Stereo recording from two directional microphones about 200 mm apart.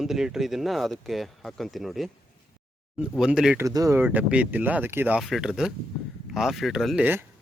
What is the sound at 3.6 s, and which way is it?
Speech, 15° right (ahead or behind).